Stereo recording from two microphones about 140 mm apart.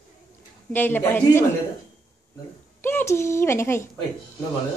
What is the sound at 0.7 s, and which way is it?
Speech, 15° left (ahead or behind).